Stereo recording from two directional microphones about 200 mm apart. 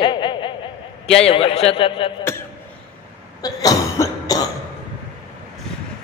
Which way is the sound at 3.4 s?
20° left (ahead or behind).